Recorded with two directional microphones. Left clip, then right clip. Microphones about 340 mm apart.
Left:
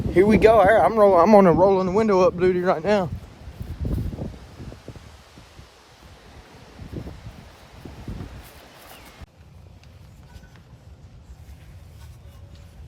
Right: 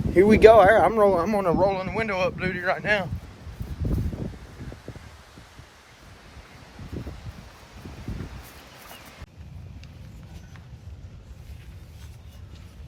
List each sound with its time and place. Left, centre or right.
0.1 s speech: centre
1.2 s speech: left